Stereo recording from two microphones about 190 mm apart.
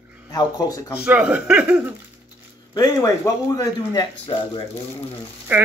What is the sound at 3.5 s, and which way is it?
Speech, 20° left (ahead or behind).